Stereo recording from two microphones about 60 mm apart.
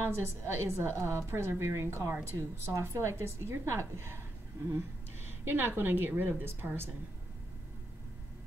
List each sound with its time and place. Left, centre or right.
0.0 s a woman's voice: right
5.4 s a woman's voice: right